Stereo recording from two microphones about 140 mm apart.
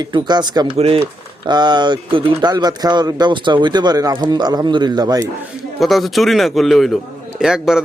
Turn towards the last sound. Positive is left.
turn(degrees=-5)  # may be behind; listen again after turning